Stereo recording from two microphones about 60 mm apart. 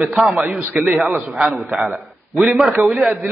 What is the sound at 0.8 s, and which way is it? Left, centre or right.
Speech, right.